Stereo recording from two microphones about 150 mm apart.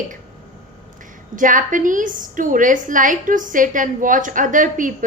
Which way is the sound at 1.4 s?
60° right (ahead or behind).